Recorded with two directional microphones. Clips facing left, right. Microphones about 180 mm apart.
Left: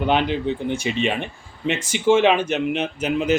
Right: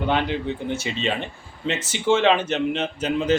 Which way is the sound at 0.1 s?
20° left (ahead or behind).